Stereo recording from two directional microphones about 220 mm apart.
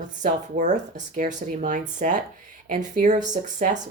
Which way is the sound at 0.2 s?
35° right (ahead or behind).